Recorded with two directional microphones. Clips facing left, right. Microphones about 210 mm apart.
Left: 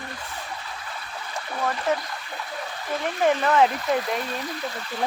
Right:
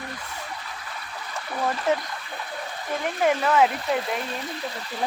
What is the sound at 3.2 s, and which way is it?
Speech, 5° right (ahead or behind).